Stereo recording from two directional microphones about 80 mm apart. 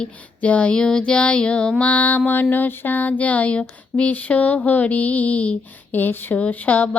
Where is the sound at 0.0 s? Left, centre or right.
Centre.